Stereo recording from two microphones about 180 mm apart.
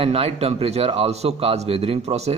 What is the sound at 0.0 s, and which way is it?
A man's voice, 35° right (ahead or behind).